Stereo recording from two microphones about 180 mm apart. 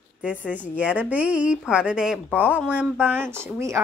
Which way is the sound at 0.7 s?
5° right (ahead or behind).